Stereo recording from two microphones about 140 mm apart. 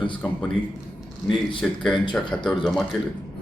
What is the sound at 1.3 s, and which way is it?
Speech, 5° left (ahead or behind).